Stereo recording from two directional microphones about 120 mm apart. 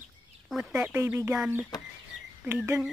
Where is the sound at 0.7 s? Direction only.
15° right (ahead or behind).